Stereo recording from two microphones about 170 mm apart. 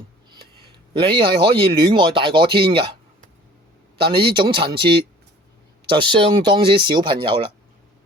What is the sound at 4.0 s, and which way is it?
Speech, 30° right (ahead or behind).